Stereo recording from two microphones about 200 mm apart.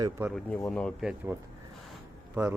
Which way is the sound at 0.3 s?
5° left (ahead or behind).